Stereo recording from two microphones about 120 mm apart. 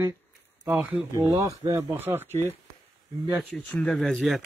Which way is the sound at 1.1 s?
30° right (ahead or behind).